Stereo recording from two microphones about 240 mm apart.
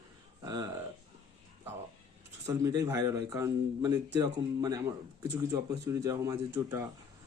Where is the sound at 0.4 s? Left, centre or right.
Centre.